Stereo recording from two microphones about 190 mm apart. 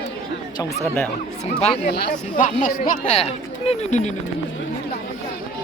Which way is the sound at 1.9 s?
55° left (ahead or behind).